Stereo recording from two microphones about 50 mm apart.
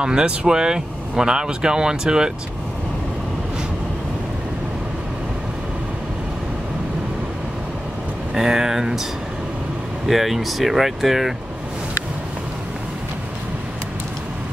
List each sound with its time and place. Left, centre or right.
0.0 s speech: centre
8.4 s speech: centre
10.0 s speech: centre